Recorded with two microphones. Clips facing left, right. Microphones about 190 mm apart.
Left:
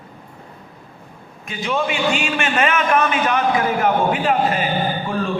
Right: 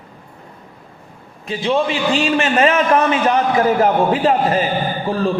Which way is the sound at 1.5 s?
30° right (ahead or behind).